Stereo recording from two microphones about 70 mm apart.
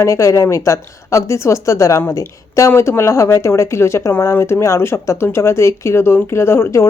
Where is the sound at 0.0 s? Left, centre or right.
Left.